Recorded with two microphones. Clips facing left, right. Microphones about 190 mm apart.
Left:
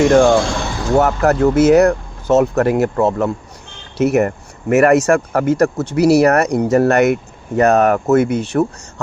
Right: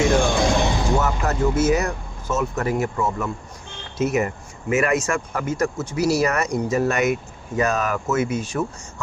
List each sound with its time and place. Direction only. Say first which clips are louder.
0.1 s speech: left 9 dB; 70° left (ahead or behind)
0.5 s a sound: right 2 dB; 20° right (ahead or behind)
0.9 s speech: left 9 dB; 65° left (ahead or behind)